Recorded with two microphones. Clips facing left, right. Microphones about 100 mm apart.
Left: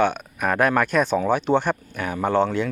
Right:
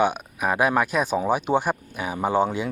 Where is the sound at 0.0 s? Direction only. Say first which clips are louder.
Left 1 dB; 5° right (ahead or behind).